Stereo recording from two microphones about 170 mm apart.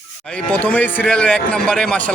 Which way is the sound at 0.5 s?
10° left (ahead or behind).